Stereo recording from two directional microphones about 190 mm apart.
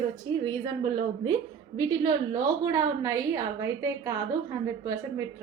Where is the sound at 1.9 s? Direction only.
20° right (ahead or behind).